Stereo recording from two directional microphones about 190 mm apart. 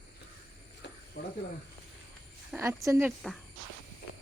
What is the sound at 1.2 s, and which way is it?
Speech, 70° left (ahead or behind).